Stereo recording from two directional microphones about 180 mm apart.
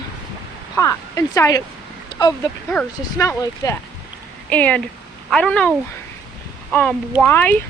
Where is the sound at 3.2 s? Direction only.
15° left (ahead or behind).